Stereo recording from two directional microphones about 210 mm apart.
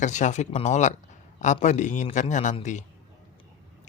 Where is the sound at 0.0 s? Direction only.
35° left (ahead or behind).